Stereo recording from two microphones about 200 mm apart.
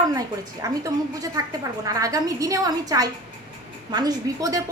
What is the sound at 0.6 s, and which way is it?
A woman's voice, 15° right (ahead or behind).